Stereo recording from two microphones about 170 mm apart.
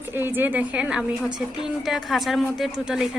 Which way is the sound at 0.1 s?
10° right (ahead or behind).